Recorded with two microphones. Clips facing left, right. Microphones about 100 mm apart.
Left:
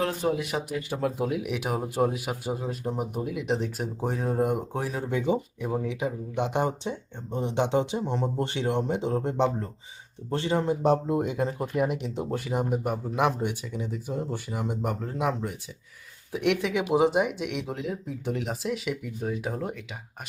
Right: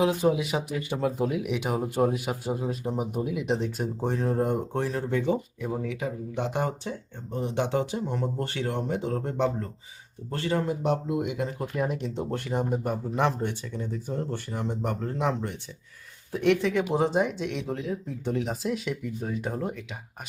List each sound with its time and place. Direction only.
0.0 s speech: 5° right (ahead or behind); by 10.8 s 20° left (ahead or behind)
10.8 s speech: 35° left (ahead or behind)
11.8 s speech: 10° left (ahead or behind)